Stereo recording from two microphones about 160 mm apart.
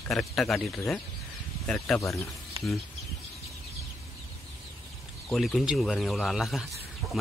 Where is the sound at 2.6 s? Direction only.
35° right (ahead or behind).